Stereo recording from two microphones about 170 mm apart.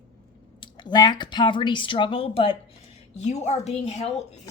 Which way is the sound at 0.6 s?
25° left (ahead or behind).